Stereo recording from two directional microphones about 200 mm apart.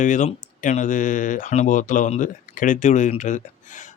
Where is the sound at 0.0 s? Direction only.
40° left (ahead or behind).